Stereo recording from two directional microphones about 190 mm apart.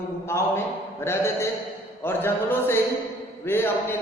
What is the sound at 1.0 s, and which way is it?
Speech, 15° left (ahead or behind).